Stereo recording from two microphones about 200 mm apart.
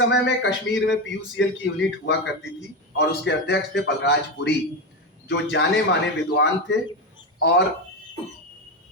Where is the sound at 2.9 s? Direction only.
60° left (ahead or behind).